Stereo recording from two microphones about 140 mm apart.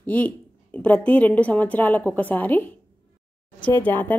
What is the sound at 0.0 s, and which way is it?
A woman's voice, 10° left (ahead or behind).